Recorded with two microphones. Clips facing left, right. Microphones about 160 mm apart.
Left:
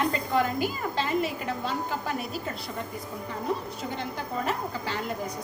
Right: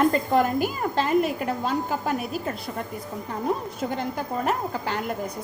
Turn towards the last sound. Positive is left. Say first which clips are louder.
# right 4 dB
turn(degrees=-50)  # may be behind; listen again after turning